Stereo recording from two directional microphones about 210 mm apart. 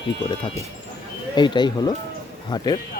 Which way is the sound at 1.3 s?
20° left (ahead or behind).